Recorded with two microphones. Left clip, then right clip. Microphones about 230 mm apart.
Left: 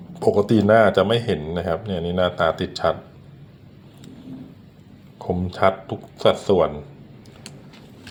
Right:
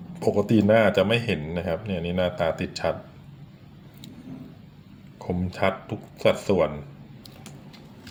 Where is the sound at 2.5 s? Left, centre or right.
Left.